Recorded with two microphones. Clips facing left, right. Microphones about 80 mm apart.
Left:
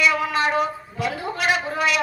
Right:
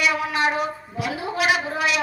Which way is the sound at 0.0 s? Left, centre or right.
Centre.